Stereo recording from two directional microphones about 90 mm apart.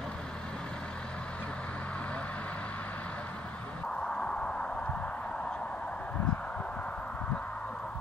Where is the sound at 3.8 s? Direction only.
10° left (ahead or behind).